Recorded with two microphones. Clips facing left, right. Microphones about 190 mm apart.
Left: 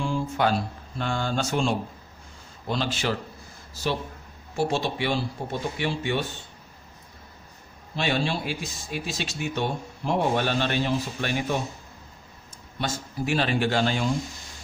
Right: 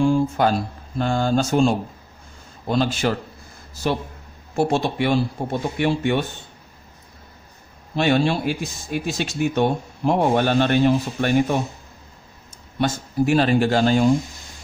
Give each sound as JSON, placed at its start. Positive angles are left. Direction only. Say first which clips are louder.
{"t": 0.0, "sound": "speech", "louder": "right 7 dB", "side_deg": -45}
{"t": 4.6, "sound": "speech", "louder": "right 5 dB", "side_deg": -50}
{"t": 7.9, "sound": "speech", "louder": "right 7 dB", "side_deg": -50}
{"t": 12.7, "sound": "speech", "louder": "right 9 dB", "side_deg": -50}